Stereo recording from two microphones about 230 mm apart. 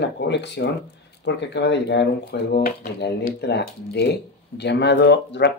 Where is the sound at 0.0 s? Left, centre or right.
Left.